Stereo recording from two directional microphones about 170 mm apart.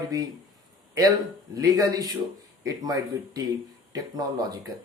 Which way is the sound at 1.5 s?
20° right (ahead or behind).